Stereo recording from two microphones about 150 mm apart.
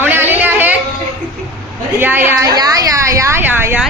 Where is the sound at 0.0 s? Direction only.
15° right (ahead or behind).